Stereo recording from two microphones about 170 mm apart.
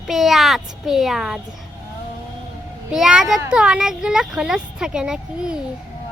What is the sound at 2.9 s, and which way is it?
Speech, 5° right (ahead or behind).